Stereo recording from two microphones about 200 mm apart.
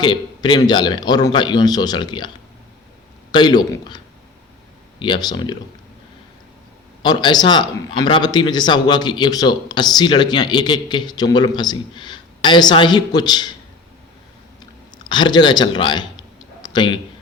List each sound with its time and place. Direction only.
0.0 s speech: 25° left (ahead or behind)
3.3 s speech: 20° left (ahead or behind)
7.0 s speech: 20° left (ahead or behind)
15.1 s speech: 20° left (ahead or behind)